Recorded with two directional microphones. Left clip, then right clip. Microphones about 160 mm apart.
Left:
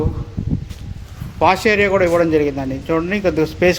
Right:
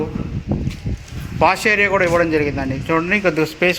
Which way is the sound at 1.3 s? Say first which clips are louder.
Left 1 dB; 15° left (ahead or behind).